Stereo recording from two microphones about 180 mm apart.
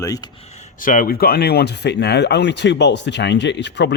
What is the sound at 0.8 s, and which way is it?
A man's voice, 50° left (ahead or behind).